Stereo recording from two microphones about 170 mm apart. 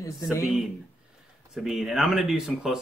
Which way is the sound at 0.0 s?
20° left (ahead or behind).